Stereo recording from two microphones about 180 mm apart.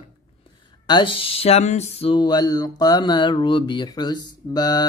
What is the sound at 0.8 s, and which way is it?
Speech, 25° left (ahead or behind).